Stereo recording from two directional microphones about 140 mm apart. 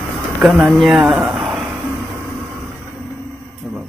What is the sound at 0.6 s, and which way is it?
Speech, centre (ahead or behind).